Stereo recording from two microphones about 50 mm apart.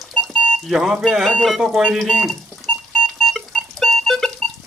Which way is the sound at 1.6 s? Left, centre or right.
Centre.